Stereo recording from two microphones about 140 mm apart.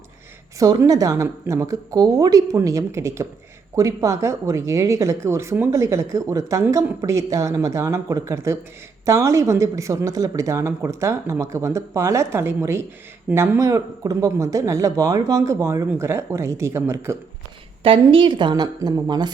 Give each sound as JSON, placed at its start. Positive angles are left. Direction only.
{"t": 0.6, "sound": "speech", "side_deg": -25}
{"t": 17.8, "sound": "a woman's voice", "side_deg": -40}